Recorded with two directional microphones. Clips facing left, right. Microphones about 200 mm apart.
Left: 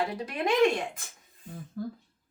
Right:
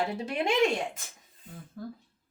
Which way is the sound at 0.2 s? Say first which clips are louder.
Right 1 dB; 25° right (ahead or behind).